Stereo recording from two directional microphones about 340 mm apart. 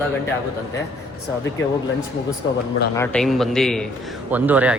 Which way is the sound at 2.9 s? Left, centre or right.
Centre.